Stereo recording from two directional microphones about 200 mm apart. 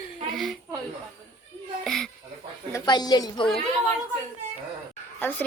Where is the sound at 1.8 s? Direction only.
Centre (ahead or behind).